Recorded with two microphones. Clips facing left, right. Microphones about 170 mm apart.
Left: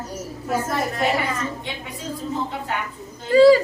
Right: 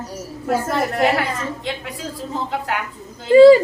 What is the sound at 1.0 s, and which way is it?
Speech, 75° right (ahead or behind).